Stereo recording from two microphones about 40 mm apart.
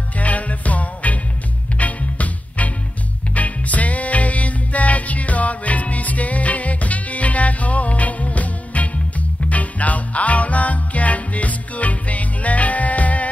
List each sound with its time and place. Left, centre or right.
0.2 s music: left